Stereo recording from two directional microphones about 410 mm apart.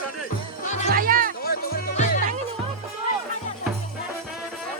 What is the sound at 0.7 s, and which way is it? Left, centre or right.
Music, centre.